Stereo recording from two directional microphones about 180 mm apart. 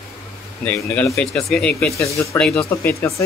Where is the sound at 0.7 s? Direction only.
10° left (ahead or behind).